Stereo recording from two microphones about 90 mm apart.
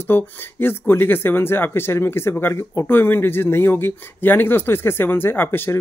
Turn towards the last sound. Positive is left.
turn(degrees=25)  # may be behind; listen again after turning